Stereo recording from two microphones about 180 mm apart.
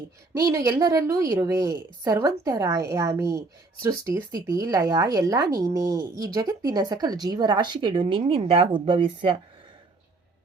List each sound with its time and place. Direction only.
0.4 s a woman's voice: 20° right (ahead or behind)